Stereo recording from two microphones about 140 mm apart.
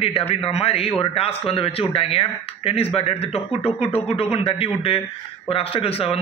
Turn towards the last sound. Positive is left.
turn(degrees=45)  # may be behind; listen again after turning